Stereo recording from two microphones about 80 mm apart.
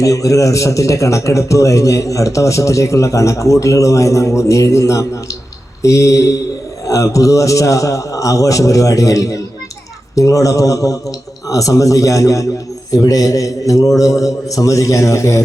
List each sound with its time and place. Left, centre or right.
0.0 s a man's voice: left